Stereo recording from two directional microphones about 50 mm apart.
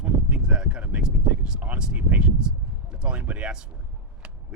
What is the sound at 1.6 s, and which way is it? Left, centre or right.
Speech, right.